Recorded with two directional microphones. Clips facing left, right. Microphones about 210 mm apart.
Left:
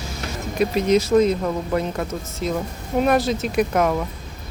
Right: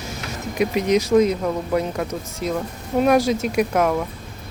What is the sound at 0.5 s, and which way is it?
Speech, 15° right (ahead or behind).